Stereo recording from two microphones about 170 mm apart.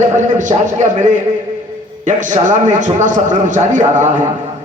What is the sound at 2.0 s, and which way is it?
A man's voice, 45° right (ahead or behind).